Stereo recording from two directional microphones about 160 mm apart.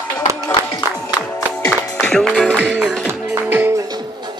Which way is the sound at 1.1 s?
15° left (ahead or behind).